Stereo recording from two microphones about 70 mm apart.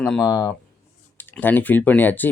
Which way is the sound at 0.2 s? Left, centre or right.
Left.